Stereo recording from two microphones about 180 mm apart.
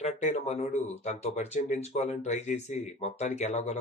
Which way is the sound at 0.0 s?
40° left (ahead or behind).